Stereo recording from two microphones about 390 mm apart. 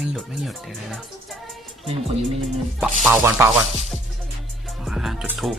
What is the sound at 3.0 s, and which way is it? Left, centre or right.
Speech, centre.